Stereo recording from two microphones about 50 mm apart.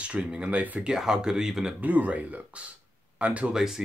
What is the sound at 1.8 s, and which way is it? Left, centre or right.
Speech, right.